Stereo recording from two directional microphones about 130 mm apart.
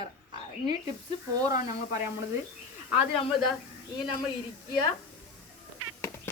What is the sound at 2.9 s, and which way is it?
Speech, 45° left (ahead or behind).